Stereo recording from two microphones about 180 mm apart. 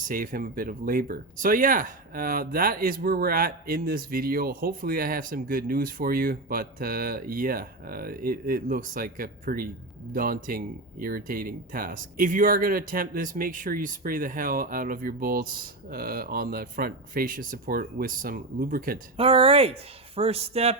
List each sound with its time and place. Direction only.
0.0 s speech: 50° right (ahead or behind)
19.1 s speech: 30° right (ahead or behind)